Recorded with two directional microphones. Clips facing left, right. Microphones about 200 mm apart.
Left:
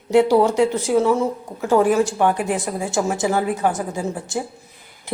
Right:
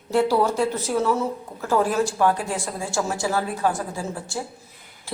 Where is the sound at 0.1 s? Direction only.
15° left (ahead or behind).